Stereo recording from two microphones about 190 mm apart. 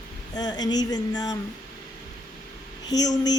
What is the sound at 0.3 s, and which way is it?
A woman's voice, 20° left (ahead or behind).